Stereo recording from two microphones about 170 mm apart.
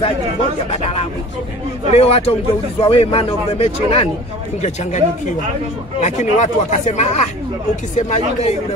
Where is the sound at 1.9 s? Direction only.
35° left (ahead or behind).